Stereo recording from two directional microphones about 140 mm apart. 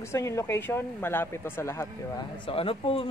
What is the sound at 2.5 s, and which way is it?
Speech, 40° left (ahead or behind).